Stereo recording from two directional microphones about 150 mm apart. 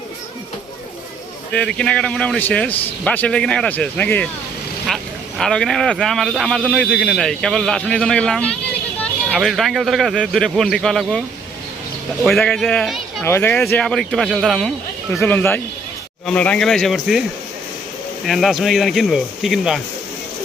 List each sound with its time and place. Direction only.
1.5 s a man's voice: 5° left (ahead or behind)
12.2 s a man's voice: centre (ahead or behind)
13.2 s a man's voice: 15° left (ahead or behind); by 17.2 s centre (ahead or behind)
18.3 s a man's voice: centre (ahead or behind)